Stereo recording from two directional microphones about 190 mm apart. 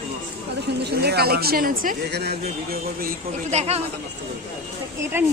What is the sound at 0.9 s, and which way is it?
Speech, 55° right (ahead or behind).